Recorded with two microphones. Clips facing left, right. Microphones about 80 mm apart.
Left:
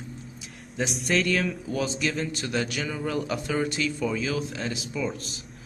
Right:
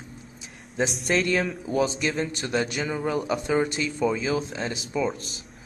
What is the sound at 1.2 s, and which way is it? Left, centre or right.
A man's voice, right.